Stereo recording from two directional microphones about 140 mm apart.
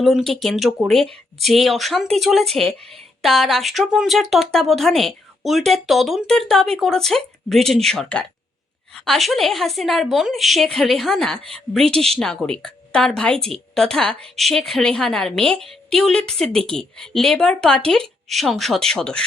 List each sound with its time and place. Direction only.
0.0 s a woman's voice: centre (ahead or behind)